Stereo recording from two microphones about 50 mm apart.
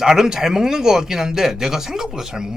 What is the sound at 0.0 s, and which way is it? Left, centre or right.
Speech, centre.